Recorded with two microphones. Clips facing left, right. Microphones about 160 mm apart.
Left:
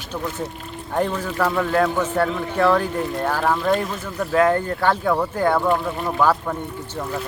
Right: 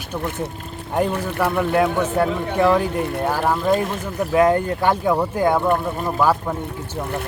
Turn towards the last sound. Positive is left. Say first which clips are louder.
# right 1 dB
turn(degrees=-5)  # may be behind; listen again after turning